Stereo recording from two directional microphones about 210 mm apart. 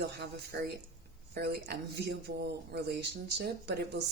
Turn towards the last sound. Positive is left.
turn(degrees=-50)  # may be behind; listen again after turning